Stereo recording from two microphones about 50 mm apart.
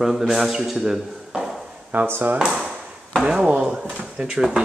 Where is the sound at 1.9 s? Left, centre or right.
Right.